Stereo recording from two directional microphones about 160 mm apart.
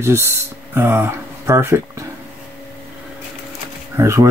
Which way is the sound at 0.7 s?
15° right (ahead or behind).